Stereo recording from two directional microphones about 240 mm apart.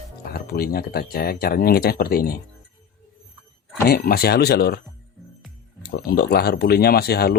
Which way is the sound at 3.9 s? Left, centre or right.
Left.